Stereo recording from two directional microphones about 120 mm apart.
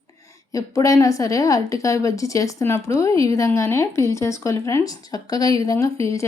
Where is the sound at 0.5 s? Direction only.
25° left (ahead or behind).